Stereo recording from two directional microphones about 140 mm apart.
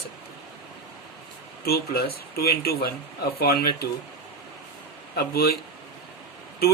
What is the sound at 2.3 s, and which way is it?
Speech, 90° left.